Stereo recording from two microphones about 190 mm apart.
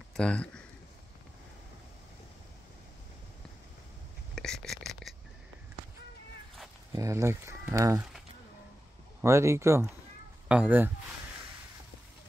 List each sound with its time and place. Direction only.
0.1 s speech: 5° left (ahead or behind)
4.4 s whispering: centre (ahead or behind)
6.9 s speech: 15° right (ahead or behind)
9.2 s speech: 15° right (ahead or behind)